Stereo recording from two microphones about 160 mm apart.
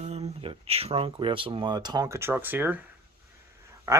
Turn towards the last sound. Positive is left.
turn(degrees=-15)  # may be behind; listen again after turning